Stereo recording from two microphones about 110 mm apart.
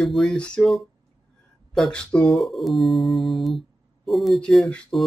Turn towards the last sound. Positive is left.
turn(degrees=5)  # may be behind; listen again after turning